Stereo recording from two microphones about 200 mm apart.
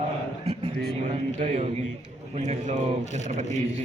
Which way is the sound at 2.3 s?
35° right (ahead or behind).